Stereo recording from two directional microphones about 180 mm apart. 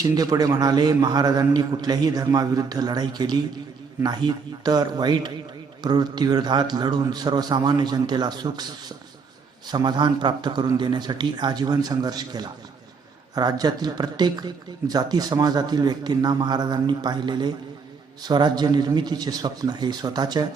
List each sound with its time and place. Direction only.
0.0 s speech: 20° right (ahead or behind)
9.6 s speech: 25° right (ahead or behind)